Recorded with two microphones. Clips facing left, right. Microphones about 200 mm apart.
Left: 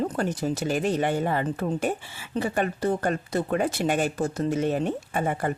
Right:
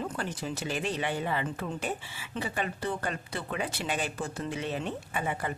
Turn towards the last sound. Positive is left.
turn(degrees=45)  # may be behind; listen again after turning